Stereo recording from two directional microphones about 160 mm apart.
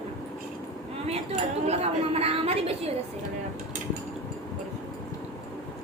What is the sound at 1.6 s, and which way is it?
A woman's voice, 40° right (ahead or behind).